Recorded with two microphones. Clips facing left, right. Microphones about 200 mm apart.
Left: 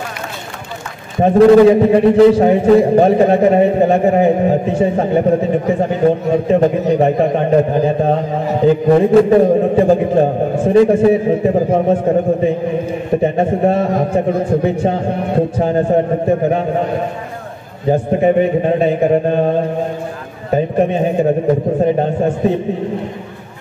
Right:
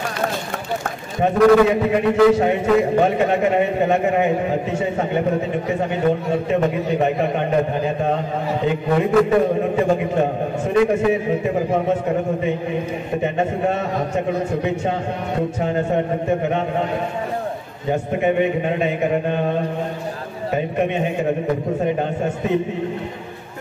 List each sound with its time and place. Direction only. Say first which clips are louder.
1.2 s a man's voice: left 6 dB; 30° left (ahead or behind)
17.8 s a man's voice: left 7 dB; 35° left (ahead or behind)